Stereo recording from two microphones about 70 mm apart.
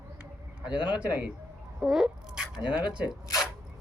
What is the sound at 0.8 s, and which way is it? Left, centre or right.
Speech, centre.